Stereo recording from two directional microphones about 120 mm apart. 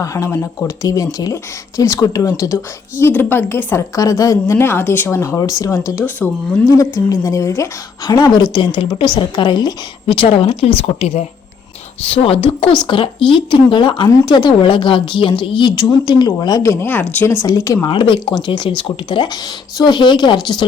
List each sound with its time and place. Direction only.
0.0 s a woman's voice: 25° left (ahead or behind)
3.0 s a woman's voice: 15° left (ahead or behind)
3.9 s a woman's voice: 30° left (ahead or behind)
16.8 s a woman's voice: 15° left (ahead or behind)
17.8 s a woman's voice: 45° left (ahead or behind)